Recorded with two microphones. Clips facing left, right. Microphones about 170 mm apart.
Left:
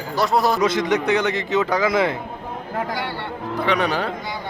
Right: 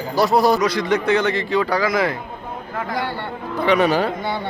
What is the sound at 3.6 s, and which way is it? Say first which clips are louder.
Speech: right 5 dB; 5° right (ahead or behind).